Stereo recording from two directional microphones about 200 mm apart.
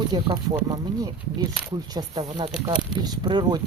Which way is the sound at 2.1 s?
25° right (ahead or behind).